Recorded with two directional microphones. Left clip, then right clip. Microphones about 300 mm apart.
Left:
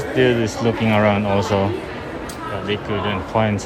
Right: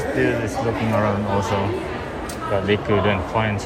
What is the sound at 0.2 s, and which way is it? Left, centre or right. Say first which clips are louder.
Speech: left 6 dB; left.